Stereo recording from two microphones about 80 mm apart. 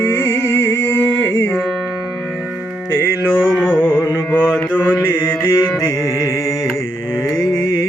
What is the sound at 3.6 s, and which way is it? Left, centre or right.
Carnatic music, centre.